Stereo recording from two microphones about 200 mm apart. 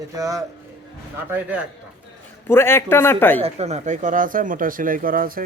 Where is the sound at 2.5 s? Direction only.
10° left (ahead or behind).